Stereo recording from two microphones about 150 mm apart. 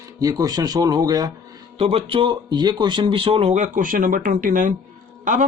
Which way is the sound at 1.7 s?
40° right (ahead or behind).